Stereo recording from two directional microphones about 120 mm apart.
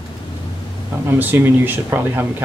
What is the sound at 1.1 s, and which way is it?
Speech, 15° right (ahead or behind).